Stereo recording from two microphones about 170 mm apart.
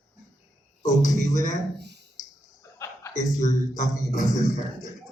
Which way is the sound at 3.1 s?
45° left (ahead or behind).